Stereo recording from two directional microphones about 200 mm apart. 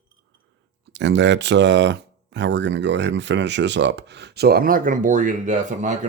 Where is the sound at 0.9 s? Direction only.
60° right (ahead or behind).